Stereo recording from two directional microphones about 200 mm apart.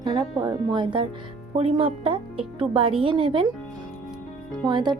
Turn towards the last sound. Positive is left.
turn(degrees=-20)  # may be behind; listen again after turning